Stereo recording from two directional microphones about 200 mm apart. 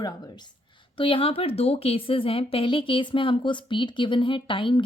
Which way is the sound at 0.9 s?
25° left (ahead or behind).